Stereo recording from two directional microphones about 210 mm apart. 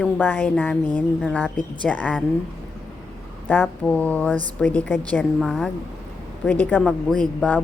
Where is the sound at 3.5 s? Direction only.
5° left (ahead or behind).